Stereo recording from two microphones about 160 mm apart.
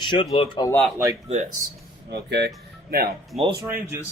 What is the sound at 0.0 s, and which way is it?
Speech, 30° left (ahead or behind).